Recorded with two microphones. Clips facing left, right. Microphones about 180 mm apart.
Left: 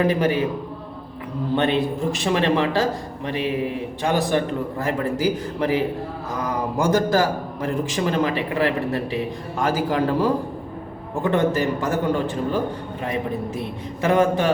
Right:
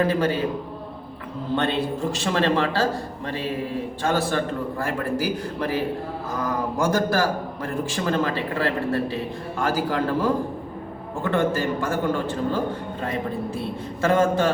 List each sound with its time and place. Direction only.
0.0 s a man's voice: 15° left (ahead or behind)
1.5 s a man's voice: 15° left (ahead or behind)